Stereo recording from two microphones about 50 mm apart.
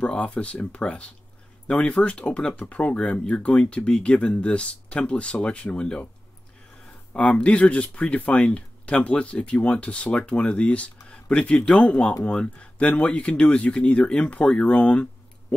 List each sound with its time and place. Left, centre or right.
0.0 s speech: left
7.2 s speech: left